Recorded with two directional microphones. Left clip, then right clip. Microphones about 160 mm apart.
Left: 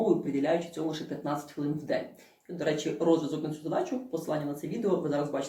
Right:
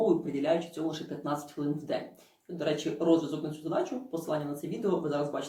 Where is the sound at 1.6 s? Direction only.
20° right (ahead or behind).